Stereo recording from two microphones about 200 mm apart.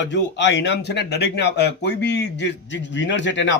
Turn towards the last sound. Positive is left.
turn(degrees=65)  # may be behind; listen again after turning